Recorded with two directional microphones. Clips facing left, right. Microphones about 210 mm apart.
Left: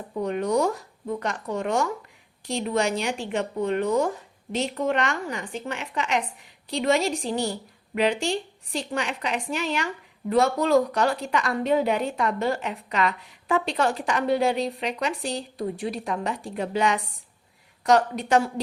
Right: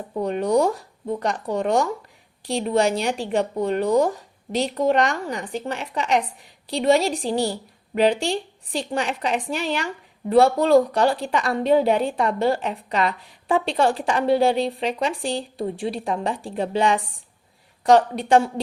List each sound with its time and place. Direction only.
0.2 s a woman's voice: 35° right (ahead or behind)